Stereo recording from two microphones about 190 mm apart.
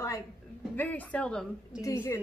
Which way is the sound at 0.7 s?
10° left (ahead or behind).